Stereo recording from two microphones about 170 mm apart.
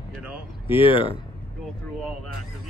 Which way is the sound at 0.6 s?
30° left (ahead or behind).